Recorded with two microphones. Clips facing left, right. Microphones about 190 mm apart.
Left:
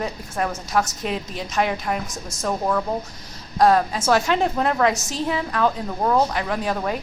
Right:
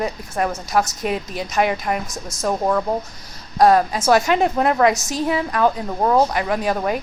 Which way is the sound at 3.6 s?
10° right (ahead or behind).